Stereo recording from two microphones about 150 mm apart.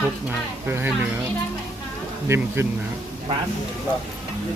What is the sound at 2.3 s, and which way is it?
Speech, 15° right (ahead or behind).